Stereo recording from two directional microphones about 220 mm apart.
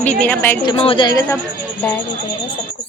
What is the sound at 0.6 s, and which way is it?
Speech, 25° left (ahead or behind).